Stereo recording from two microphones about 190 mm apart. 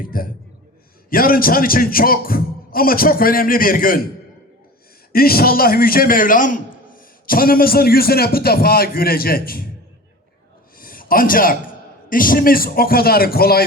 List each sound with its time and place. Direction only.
0.0 s a man's voice: 50° left (ahead or behind)
5.1 s a man's voice: 50° left (ahead or behind)
10.8 s a man's voice: 50° left (ahead or behind)